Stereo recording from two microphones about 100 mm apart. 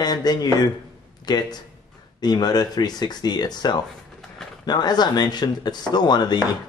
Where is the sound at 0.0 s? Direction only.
40° left (ahead or behind).